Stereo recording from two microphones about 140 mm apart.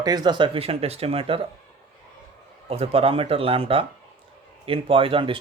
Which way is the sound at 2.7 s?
45° right (ahead or behind).